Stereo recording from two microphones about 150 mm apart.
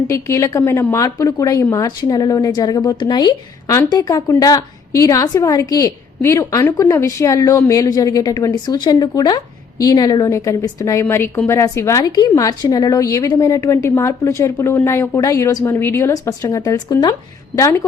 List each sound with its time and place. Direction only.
0.1 s a woman's voice: 20° left (ahead or behind)